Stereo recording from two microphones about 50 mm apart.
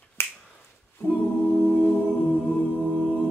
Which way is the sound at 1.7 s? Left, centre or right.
Left.